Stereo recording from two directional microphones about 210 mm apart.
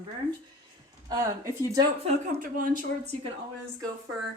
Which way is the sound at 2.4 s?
40° right (ahead or behind).